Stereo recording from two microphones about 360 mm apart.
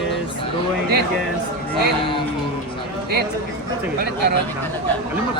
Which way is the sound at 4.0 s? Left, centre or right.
Right.